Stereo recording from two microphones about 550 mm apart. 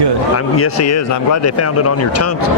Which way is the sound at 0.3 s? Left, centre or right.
Left.